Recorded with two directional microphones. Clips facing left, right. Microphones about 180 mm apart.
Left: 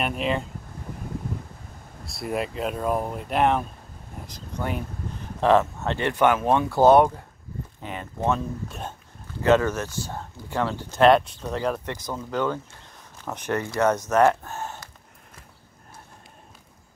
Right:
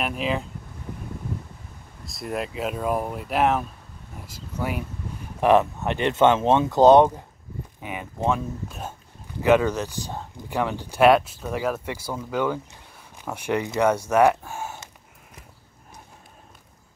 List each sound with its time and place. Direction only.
0.0 s speech: centre (ahead or behind)
2.0 s speech: centre (ahead or behind)
9.4 s speech: 15° right (ahead or behind)